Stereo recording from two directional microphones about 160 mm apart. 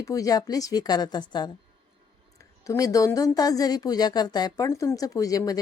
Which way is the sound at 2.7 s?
20° left (ahead or behind).